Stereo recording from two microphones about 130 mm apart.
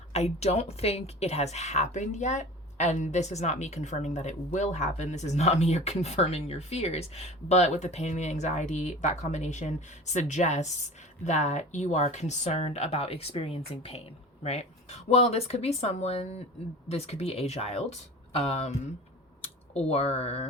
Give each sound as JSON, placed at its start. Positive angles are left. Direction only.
{"t": 0.1, "sound": "speech", "side_deg": 55}